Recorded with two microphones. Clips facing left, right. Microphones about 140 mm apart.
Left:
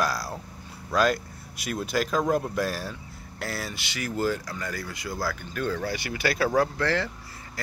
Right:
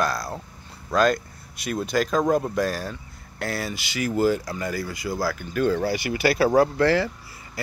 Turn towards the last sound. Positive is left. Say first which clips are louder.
# right 6 dB
turn(degrees=-10)  # may be behind; listen again after turning